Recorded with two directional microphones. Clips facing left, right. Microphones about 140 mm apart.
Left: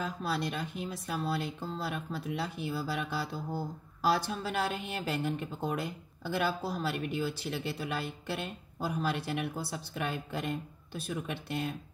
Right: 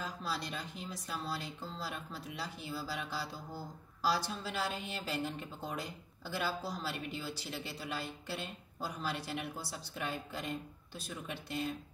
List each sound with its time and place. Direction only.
0.0 s speech: 60° left (ahead or behind)